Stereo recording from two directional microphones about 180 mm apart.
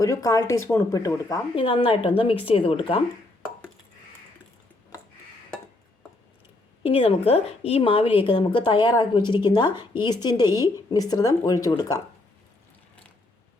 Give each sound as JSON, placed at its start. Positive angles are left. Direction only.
{"t": 0.0, "sound": "speech", "side_deg": 20}
{"t": 1.5, "sound": "a woman's voice", "side_deg": 30}
{"t": 6.8, "sound": "a woman's voice", "side_deg": 35}